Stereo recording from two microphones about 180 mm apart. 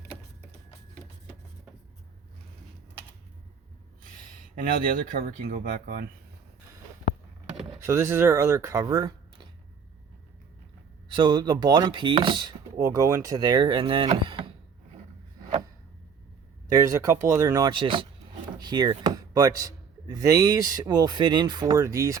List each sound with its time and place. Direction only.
5.4 s speech: 50° right (ahead or behind)
7.9 s speech: 15° right (ahead or behind)
11.1 s speech: 25° right (ahead or behind)
16.6 s speech: 15° right (ahead or behind)